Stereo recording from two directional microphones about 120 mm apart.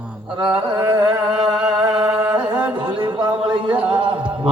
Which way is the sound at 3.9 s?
45° right (ahead or behind).